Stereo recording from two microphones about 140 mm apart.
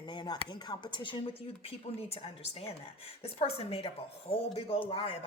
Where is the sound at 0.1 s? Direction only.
35° left (ahead or behind).